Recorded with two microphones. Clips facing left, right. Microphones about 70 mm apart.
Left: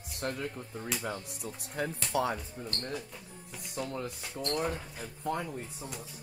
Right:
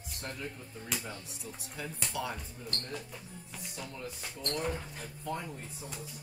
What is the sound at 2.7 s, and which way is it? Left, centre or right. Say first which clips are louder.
Speech: left 1 dB; centre.